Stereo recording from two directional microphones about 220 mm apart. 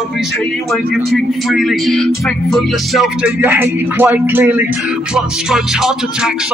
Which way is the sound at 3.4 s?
10° right (ahead or behind).